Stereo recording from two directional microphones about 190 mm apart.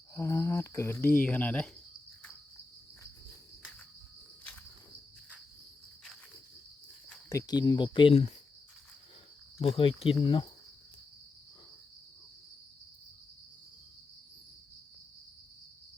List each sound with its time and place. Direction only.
0.1 s speech: 15° left (ahead or behind)
7.3 s speech: 20° left (ahead or behind)
9.6 s speech: 30° left (ahead or behind)